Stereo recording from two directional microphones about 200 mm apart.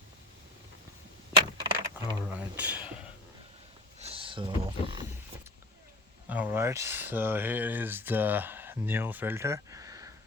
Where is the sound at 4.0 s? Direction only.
30° right (ahead or behind).